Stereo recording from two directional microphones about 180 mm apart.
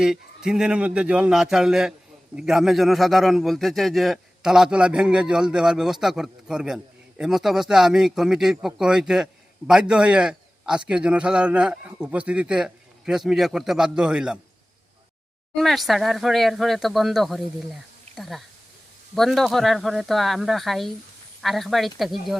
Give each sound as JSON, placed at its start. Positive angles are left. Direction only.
{"t": 0.0, "sound": "a man's voice", "side_deg": -5}
{"t": 15.5, "sound": "a man's voice", "side_deg": 0}